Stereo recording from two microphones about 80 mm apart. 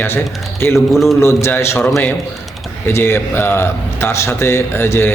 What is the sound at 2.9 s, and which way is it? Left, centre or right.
A man's voice, left.